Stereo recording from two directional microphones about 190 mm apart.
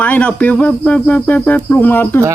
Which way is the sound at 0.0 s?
5° left (ahead or behind).